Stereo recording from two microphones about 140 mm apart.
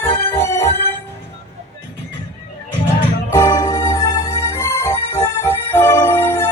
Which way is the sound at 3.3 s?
25° left (ahead or behind).